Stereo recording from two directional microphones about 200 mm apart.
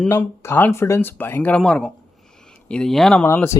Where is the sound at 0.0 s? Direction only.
10° left (ahead or behind).